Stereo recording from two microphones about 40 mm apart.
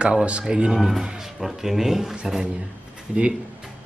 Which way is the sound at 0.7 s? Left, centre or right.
Centre.